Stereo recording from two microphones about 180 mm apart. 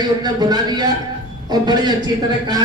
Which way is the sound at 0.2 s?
20° right (ahead or behind).